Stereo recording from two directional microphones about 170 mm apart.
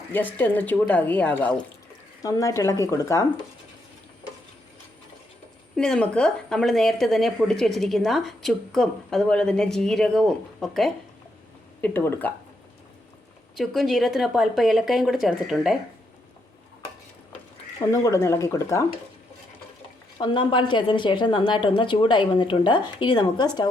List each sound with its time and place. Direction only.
0.1 s a woman's voice: 10° left (ahead or behind)
2.2 s a woman's voice: 20° left (ahead or behind)
5.7 s a woman's voice: 5° left (ahead or behind)
11.8 s a woman's voice: 10° left (ahead or behind)
13.6 s a woman's voice: centre (ahead or behind)
17.7 s a woman's voice: 20° left (ahead or behind)
20.1 s a woman's voice: 25° left (ahead or behind)